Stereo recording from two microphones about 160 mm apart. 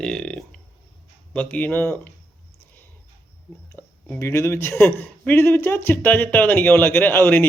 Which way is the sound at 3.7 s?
10° left (ahead or behind).